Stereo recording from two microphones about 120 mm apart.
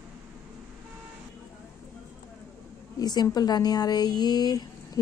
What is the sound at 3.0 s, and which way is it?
Speech, 35° left (ahead or behind).